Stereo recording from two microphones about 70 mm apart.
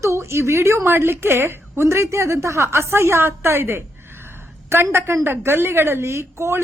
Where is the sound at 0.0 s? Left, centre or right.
Right.